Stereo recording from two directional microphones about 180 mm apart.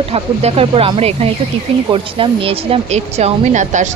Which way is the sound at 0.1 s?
35° right (ahead or behind).